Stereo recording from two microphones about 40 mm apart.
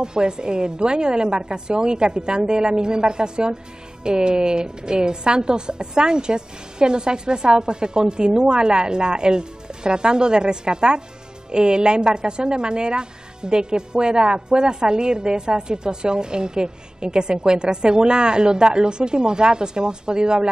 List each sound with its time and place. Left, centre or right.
0.0 s a woman's voice: right